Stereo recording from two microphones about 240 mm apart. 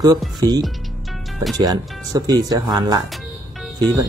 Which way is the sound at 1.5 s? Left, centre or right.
Centre.